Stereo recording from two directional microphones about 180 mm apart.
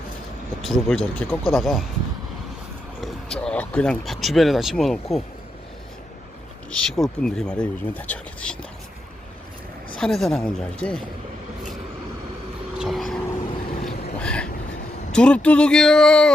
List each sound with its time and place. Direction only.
0.6 s speech: centre (ahead or behind)
3.0 s speech: 5° left (ahead or behind)
6.7 s speech: centre (ahead or behind)
10.0 s speech: centre (ahead or behind)
12.7 s vehicle: centre (ahead or behind)
15.1 s speech: 5° left (ahead or behind)